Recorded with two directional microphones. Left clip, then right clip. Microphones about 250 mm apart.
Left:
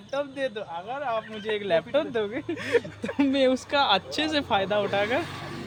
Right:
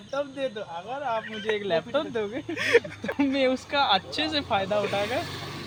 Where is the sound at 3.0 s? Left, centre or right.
Left.